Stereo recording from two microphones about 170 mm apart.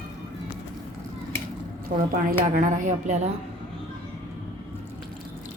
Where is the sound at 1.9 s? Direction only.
60° right (ahead or behind).